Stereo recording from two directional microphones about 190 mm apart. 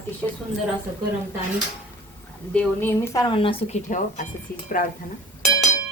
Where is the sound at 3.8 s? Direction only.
45° left (ahead or behind).